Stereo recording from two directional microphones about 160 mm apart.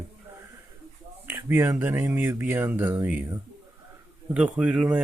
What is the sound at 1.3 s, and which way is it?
Speech, 15° right (ahead or behind).